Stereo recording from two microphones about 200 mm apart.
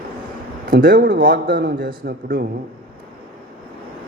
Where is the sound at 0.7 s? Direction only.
45° right (ahead or behind).